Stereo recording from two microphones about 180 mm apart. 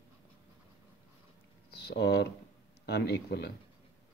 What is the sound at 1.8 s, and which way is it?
Speech, 65° left (ahead or behind).